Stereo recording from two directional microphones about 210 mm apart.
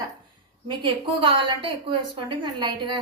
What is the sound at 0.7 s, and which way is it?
A woman's voice, 25° right (ahead or behind).